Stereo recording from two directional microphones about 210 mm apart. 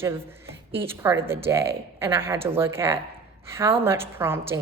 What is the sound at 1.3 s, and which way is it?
A woman's voice, 10° right (ahead or behind).